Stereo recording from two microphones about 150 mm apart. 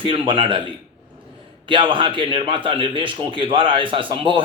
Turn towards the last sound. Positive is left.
turn(degrees=-35)  # may be behind; listen again after turning